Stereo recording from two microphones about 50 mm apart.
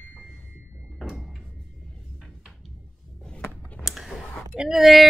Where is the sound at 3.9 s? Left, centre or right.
Centre.